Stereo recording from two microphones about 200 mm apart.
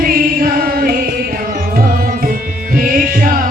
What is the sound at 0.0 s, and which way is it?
Music, 45° right (ahead or behind).